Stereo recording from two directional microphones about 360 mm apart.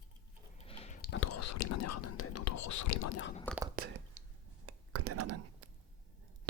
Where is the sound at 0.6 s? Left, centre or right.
Centre.